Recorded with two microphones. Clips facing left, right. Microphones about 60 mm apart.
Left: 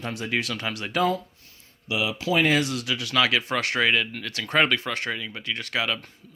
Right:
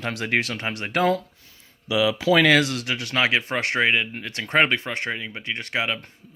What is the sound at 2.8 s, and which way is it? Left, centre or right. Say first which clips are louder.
Speech: right 1 dB; right.